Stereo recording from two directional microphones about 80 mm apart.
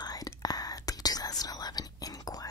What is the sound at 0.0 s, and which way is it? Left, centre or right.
Whispering, left.